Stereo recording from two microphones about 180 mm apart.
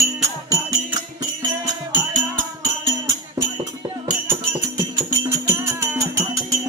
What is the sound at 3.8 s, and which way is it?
Music, 20° right (ahead or behind).